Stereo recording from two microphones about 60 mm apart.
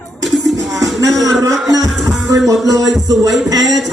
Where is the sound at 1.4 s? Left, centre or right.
Right.